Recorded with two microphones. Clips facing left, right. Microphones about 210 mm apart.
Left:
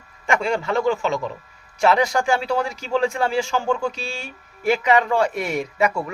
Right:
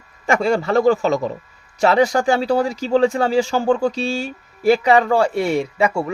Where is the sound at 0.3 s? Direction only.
40° right (ahead or behind).